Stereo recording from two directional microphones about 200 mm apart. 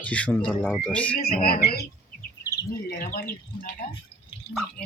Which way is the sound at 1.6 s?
50° left (ahead or behind).